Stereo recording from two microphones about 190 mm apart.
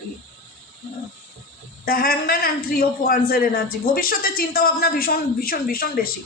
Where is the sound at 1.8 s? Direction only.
50° left (ahead or behind).